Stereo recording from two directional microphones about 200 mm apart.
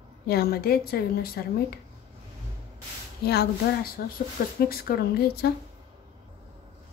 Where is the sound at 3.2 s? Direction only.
55° left (ahead or behind).